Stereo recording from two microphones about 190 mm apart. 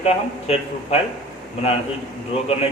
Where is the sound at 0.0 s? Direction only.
35° left (ahead or behind).